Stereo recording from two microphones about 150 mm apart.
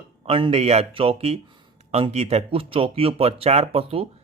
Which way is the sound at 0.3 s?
40° right (ahead or behind).